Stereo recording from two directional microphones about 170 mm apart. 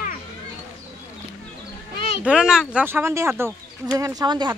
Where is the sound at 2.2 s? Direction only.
5° right (ahead or behind).